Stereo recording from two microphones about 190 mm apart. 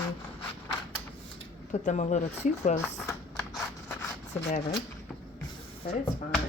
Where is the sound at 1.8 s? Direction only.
40° left (ahead or behind).